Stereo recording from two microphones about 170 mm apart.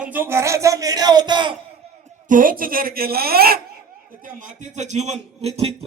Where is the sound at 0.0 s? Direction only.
10° right (ahead or behind); by 1.5 s 25° right (ahead or behind).